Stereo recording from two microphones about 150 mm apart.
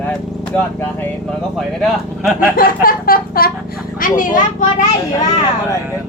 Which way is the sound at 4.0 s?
65° left (ahead or behind).